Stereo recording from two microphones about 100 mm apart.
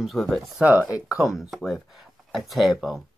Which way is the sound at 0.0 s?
Centre (ahead or behind).